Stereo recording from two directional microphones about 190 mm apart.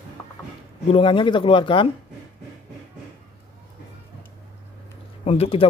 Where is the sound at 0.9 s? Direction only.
25° left (ahead or behind).